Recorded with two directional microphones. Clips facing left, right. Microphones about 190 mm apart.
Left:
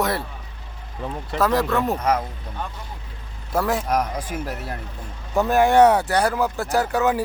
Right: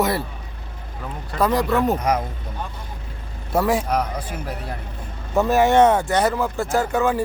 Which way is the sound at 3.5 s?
5° right (ahead or behind).